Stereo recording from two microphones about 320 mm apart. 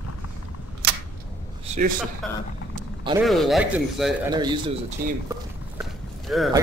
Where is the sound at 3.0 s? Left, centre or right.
Centre.